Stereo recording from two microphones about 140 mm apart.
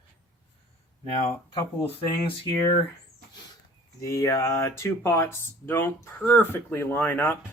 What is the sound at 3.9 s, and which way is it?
Speech, 20° left (ahead or behind).